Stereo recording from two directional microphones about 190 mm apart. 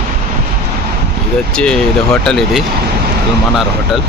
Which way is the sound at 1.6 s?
5° left (ahead or behind).